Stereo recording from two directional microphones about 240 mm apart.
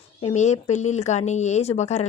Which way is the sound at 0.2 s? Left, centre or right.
Left.